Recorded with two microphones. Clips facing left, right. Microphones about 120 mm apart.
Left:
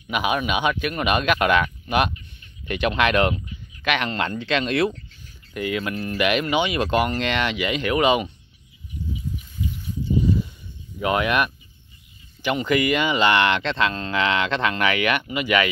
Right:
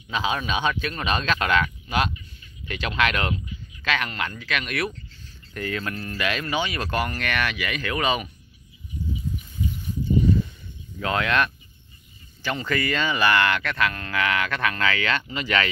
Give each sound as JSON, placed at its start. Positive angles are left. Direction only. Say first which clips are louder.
{"t": 0.1, "sound": "speech", "louder": "left 3 dB", "side_deg": 15}
{"t": 5.1, "sound": "speech", "louder": "left 4 dB", "side_deg": 15}
{"t": 11.0, "sound": "speech", "louder": "left 2 dB", "side_deg": 15}